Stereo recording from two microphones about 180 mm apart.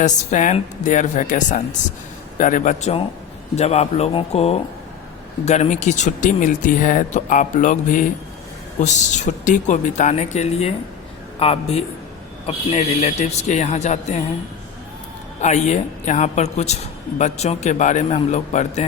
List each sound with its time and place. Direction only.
0.0 s a woman's voice: 45° left (ahead or behind)
15.4 s a woman's voice: 40° left (ahead or behind)